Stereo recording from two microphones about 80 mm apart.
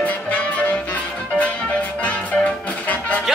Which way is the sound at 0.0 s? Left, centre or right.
Centre.